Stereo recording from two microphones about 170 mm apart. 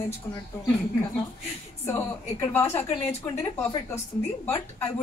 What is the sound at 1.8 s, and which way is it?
Speech, 15° left (ahead or behind).